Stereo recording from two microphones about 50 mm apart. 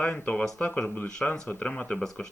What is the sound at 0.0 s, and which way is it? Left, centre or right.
Speech, left.